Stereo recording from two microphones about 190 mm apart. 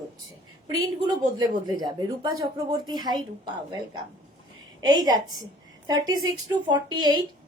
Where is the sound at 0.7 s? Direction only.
20° right (ahead or behind).